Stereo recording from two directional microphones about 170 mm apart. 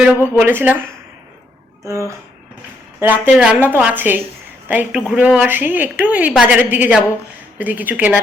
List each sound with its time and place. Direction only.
0.3 s a woman's voice: 10° right (ahead or behind)
1.8 s a woman's voice: 15° right (ahead or behind)